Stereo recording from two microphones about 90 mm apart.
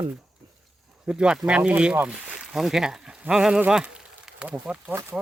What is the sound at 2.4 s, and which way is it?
Speech, 5° right (ahead or behind).